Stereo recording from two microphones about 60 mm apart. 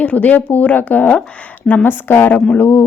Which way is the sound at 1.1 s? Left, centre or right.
Centre.